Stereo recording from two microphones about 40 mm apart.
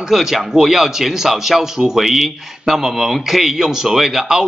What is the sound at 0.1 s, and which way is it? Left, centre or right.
A man's voice, centre.